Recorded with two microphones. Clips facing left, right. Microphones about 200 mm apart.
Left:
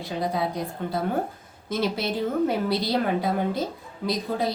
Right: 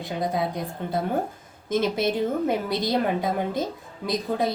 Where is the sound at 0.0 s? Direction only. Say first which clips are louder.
Right 1 dB; 20° right (ahead or behind).